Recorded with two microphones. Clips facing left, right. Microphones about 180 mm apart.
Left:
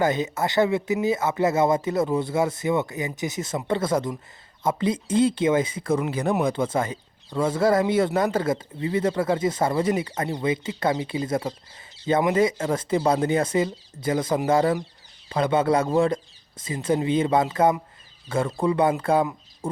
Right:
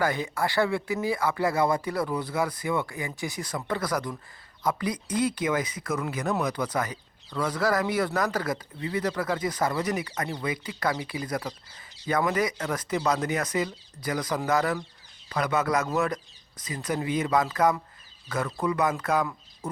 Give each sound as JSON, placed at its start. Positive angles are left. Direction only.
{"t": 0.0, "sound": "speech", "side_deg": 20}